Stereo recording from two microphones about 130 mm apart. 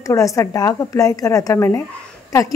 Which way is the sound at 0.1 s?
25° left (ahead or behind).